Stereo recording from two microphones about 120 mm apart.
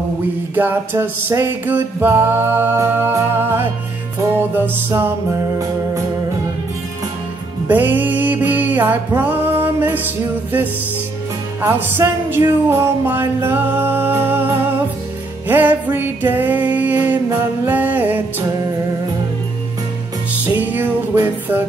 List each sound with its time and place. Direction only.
0.6 s music: 15° right (ahead or behind)
7.6 s music: 15° right (ahead or behind)
20.4 s music: 15° right (ahead or behind)